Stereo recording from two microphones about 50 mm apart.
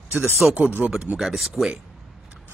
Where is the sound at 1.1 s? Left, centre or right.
Centre.